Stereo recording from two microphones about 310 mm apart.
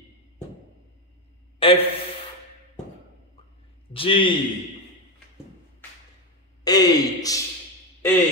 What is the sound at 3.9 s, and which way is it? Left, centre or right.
Speech, centre.